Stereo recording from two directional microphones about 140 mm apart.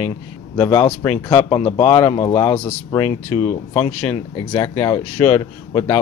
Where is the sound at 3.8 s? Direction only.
10° left (ahead or behind).